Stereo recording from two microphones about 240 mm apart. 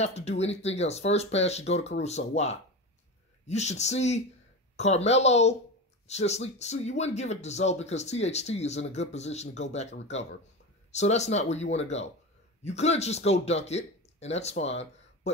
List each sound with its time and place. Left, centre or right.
0.0 s speech: left